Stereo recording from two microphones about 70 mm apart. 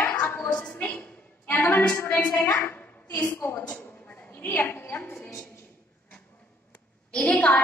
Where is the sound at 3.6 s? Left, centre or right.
Centre.